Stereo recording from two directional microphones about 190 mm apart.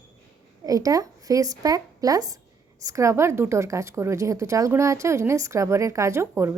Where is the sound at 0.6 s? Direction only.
20° right (ahead or behind).